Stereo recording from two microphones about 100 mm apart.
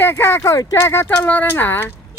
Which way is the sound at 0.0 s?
25° left (ahead or behind).